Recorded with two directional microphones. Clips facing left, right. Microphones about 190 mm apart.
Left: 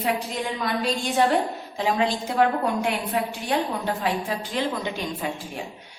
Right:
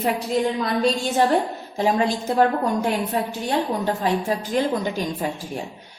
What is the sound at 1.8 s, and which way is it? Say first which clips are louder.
A woman's voice: right 3 dB; 45° right (ahead or behind).